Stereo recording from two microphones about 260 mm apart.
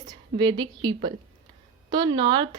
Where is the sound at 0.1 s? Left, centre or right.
Centre.